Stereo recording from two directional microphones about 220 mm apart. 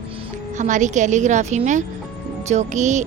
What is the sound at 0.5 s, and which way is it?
Speech, 35° right (ahead or behind).